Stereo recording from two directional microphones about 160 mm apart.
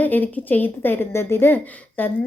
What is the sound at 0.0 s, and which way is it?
A woman's voice, 10° left (ahead or behind).